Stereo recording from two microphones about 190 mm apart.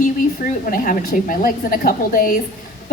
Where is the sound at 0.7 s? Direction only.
45° left (ahead or behind).